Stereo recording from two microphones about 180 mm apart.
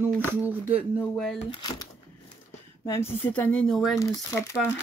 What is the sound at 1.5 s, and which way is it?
Speech, 25° left (ahead or behind).